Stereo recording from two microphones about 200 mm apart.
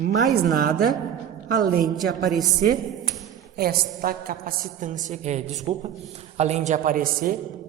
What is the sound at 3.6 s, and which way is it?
A woman's voice, 50° right (ahead or behind).